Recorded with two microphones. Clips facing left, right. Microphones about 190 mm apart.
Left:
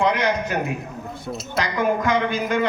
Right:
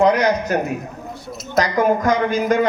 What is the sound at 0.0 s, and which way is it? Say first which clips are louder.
A woman's voice: right 5 dB; 40° right (ahead or behind).